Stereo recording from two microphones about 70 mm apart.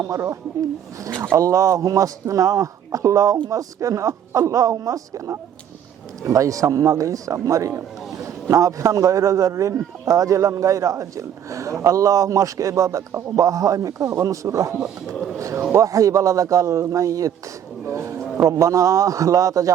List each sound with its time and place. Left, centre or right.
0.0 s a man's voice: right